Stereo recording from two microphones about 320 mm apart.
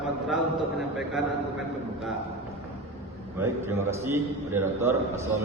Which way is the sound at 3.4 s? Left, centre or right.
Centre.